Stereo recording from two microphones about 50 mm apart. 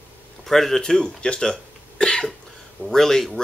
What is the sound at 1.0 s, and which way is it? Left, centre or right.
Speech, centre.